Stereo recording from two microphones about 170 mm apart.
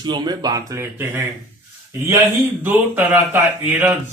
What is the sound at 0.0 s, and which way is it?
Speech, 25° right (ahead or behind).